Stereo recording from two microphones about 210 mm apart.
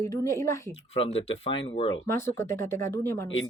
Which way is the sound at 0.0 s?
15° left (ahead or behind).